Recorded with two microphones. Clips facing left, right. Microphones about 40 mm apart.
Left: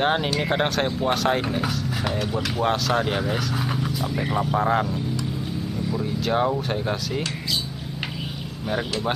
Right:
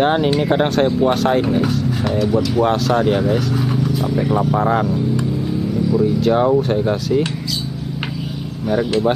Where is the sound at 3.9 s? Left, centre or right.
Centre.